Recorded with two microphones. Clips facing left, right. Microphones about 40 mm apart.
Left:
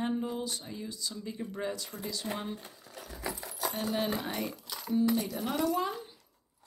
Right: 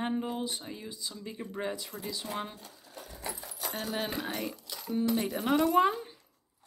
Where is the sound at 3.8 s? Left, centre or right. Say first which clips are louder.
Left 2 dB; centre.